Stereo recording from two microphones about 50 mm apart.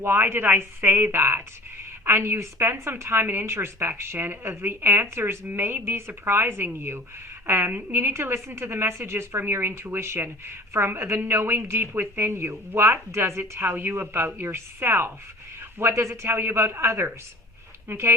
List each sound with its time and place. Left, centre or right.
0.0 s speech: right
2.0 s a woman's voice: right
5.5 s a woman's voice: right
13.5 s speech: right
15.8 s a woman's voice: right